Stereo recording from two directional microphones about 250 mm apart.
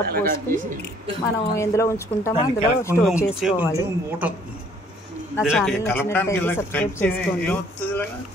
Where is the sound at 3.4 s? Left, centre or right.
Centre.